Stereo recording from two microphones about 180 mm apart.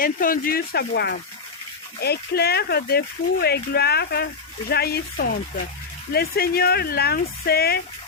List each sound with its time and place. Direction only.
0.0 s speech: 50° left (ahead or behind)